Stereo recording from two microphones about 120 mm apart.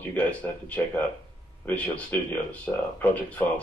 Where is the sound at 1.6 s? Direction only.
10° left (ahead or behind).